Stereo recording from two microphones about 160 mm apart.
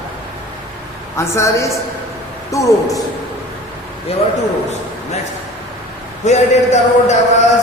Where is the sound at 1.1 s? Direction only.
15° left (ahead or behind).